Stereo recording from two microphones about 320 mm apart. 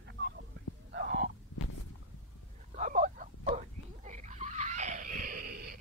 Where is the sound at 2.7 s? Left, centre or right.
Right.